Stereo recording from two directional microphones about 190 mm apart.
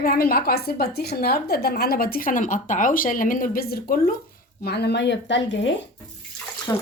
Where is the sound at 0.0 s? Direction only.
50° left (ahead or behind); by 5.7 s 70° left (ahead or behind).